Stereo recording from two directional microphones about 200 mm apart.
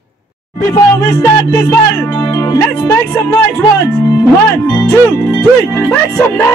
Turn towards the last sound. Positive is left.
turn(degrees=10)  # may be behind; listen again after turning